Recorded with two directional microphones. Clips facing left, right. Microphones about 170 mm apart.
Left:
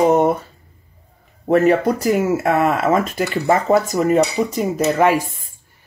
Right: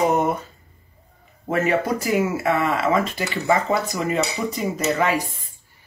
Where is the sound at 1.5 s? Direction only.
40° left (ahead or behind).